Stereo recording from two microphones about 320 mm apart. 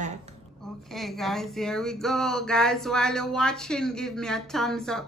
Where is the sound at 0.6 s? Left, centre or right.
Centre.